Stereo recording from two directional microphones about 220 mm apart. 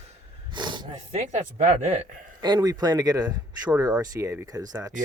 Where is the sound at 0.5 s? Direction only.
20° right (ahead or behind).